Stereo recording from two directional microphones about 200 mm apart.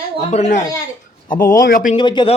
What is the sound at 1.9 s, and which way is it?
Speech, 25° left (ahead or behind).